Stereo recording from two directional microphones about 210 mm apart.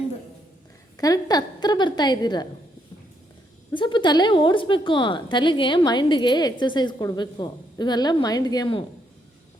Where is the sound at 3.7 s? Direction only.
20° left (ahead or behind).